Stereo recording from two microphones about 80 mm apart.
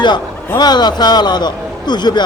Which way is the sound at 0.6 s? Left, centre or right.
Left.